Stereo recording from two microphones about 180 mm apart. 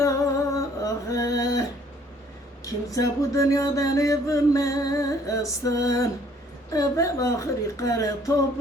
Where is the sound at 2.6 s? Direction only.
20° left (ahead or behind).